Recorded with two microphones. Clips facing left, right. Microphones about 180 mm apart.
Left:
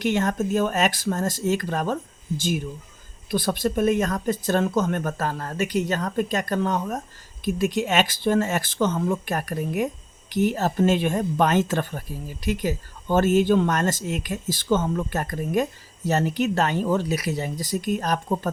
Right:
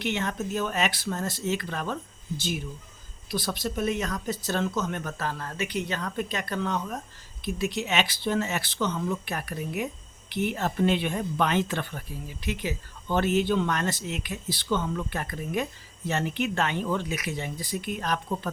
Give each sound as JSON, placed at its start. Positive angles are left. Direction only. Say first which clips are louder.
{"t": 0.0, "sound": "speech", "louder": "left 7 dB", "side_deg": 45}
{"t": 3.2, "sound": "speech", "louder": "left 7 dB", "side_deg": 55}